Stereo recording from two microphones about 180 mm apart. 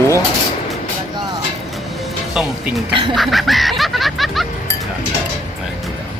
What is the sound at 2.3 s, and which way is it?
Speech, 5° right (ahead or behind).